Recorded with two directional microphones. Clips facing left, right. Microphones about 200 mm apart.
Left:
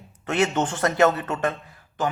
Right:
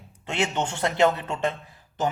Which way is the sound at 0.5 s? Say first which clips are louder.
Left 3 dB; 10° right (ahead or behind).